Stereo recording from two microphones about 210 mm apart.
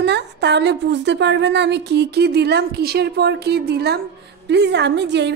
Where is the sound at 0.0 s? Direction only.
55° right (ahead or behind).